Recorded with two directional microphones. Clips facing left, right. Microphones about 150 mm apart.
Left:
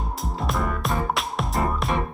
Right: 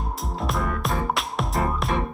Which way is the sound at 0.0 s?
Centre (ahead or behind).